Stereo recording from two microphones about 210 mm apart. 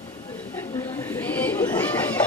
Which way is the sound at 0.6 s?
10° left (ahead or behind).